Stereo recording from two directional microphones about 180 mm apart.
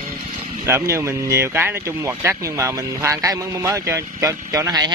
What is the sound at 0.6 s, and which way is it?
Speech, 15° right (ahead or behind).